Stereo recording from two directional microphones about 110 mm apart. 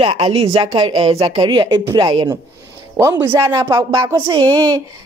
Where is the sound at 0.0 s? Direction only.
60° right (ahead or behind).